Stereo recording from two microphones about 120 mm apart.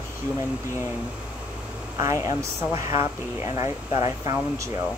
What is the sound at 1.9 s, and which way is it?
A woman's voice, 25° right (ahead or behind).